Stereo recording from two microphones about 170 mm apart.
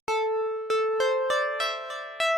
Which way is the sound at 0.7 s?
Centre (ahead or behind).